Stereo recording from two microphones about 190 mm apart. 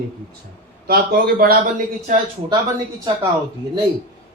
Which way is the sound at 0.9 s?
55° right (ahead or behind).